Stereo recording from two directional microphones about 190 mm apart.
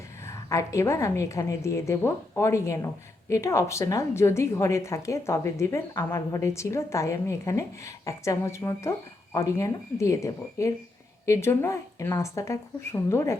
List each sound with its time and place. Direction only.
0.3 s a woman's voice: 15° left (ahead or behind)